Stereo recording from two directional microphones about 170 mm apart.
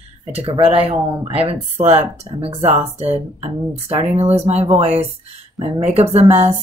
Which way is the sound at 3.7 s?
40° right (ahead or behind).